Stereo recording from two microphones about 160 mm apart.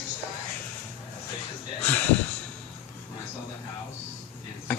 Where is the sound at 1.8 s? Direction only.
10° left (ahead or behind).